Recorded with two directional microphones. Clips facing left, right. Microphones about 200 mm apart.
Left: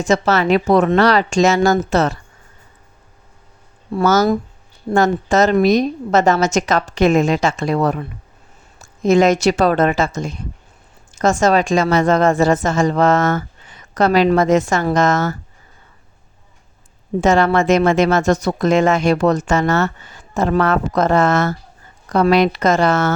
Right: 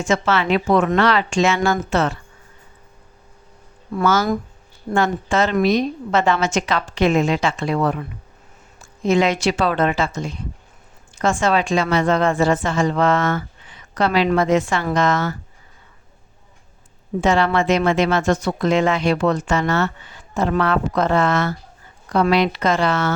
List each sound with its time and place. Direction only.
0.0 s a woman's voice: 40° left (ahead or behind)
3.9 s a woman's voice: 40° left (ahead or behind)
17.2 s speech: 45° left (ahead or behind)